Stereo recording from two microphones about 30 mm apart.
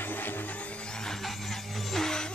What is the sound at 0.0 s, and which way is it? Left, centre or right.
Music, left.